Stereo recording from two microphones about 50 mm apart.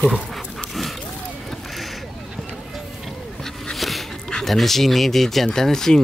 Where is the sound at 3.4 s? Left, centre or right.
Centre.